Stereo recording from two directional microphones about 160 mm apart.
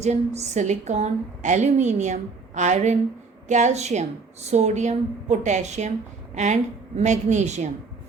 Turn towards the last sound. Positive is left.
turn(degrees=-45)  # may be behind; listen again after turning